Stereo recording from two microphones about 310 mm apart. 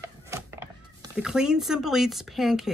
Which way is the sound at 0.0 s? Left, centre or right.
Centre.